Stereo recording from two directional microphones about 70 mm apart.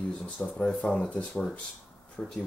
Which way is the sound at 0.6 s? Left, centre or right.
Centre.